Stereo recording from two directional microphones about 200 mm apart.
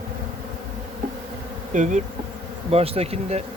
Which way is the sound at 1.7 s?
35° right (ahead or behind).